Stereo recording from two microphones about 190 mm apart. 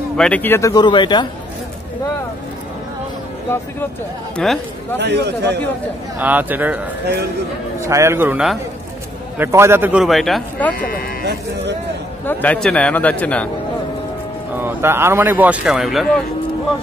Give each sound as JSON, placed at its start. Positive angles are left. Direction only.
{"t": 0.2, "sound": "a man's voice", "side_deg": 10}
{"t": 4.9, "sound": "a man's voice", "side_deg": -65}
{"t": 6.1, "sound": "speech", "side_deg": -10}
{"t": 7.8, "sound": "speech", "side_deg": -15}
{"t": 10.8, "sound": "speech", "side_deg": 50}
{"t": 12.3, "sound": "a man's voice", "side_deg": 10}
{"t": 14.6, "sound": "speech", "side_deg": -10}